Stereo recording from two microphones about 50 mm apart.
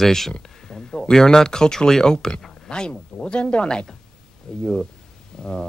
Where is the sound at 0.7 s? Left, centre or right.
Centre.